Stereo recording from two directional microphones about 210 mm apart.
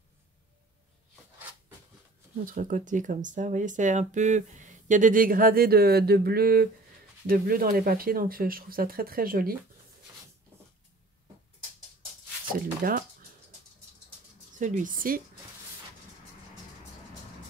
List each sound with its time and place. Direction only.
2.4 s speech: 40° right (ahead or behind)
12.8 s speech: 45° right (ahead or behind)
14.6 s speech: 35° right (ahead or behind)